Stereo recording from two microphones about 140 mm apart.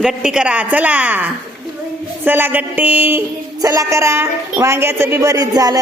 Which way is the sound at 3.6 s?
25° right (ahead or behind).